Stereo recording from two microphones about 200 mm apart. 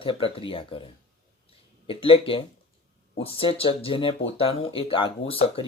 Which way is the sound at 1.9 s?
25° left (ahead or behind).